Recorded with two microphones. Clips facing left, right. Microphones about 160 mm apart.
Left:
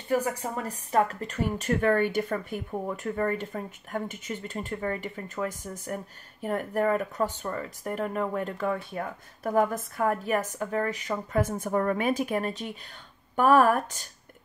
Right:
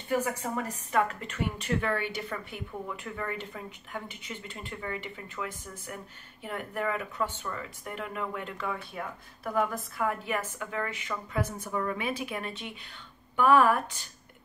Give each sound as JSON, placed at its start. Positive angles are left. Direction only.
{"t": 0.1, "sound": "speech", "side_deg": 35}